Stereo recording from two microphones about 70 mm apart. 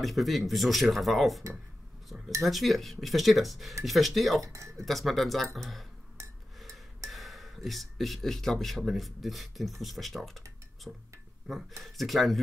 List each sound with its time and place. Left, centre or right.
0.0 s speech: centre
4.4 s speech: right
4.8 s speech: centre
7.1 s speech: centre
10.9 s speech: centre